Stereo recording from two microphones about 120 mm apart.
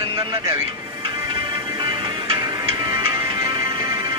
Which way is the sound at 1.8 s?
40° right (ahead or behind).